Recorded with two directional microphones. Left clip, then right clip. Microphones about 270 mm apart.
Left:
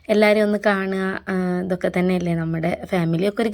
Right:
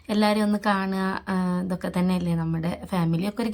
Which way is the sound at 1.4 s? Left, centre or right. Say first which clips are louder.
Left 5 dB; right.